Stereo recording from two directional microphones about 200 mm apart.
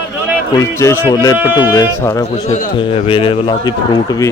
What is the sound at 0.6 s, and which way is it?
A man's voice, 15° left (ahead or behind).